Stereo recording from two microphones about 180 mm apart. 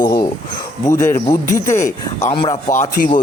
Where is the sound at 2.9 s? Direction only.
50° left (ahead or behind).